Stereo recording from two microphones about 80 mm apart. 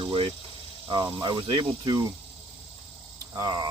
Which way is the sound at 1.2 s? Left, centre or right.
Right.